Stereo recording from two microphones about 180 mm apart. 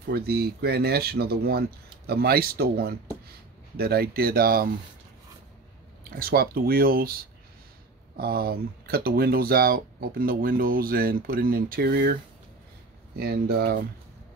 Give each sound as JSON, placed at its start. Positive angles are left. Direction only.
{"t": 0.1, "sound": "speech", "side_deg": -60}
{"t": 6.0, "sound": "speech", "side_deg": -55}
{"t": 8.2, "sound": "speech", "side_deg": -55}
{"t": 13.2, "sound": "speech", "side_deg": -60}